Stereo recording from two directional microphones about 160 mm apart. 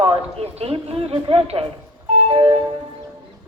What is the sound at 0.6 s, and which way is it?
Speech, 35° right (ahead or behind).